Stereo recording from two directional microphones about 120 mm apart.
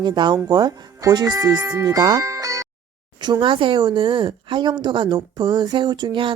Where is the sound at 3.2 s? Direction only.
40° right (ahead or behind).